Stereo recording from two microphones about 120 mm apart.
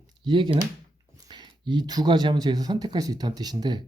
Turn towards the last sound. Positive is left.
turn(degrees=-35)  # may be behind; listen again after turning